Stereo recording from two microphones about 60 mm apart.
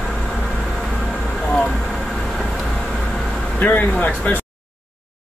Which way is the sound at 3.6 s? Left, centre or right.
Left.